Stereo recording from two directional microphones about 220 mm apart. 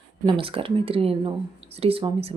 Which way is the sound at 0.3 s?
25° right (ahead or behind).